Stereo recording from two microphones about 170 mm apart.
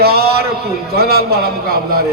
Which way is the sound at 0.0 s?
65° right (ahead or behind).